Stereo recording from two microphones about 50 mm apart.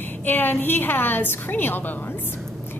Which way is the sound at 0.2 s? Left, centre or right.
Left.